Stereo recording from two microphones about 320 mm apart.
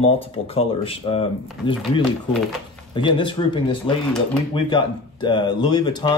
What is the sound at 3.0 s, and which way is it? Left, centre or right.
Speech, centre.